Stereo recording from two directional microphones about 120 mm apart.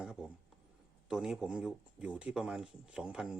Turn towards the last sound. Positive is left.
turn(degrees=-5)  # may be behind; listen again after turning